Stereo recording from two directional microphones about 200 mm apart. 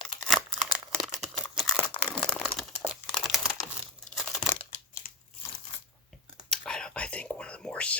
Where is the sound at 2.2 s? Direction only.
5° left (ahead or behind).